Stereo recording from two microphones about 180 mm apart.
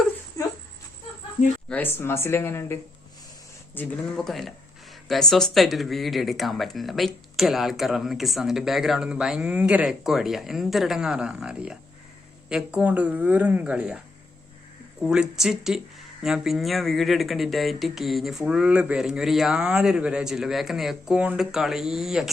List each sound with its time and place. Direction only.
0.4 s a sound: 20° left (ahead or behind)
1.7 s speech: 10° left (ahead or behind)
3.8 s speech: 5° left (ahead or behind)
15.0 s speech: 5° right (ahead or behind)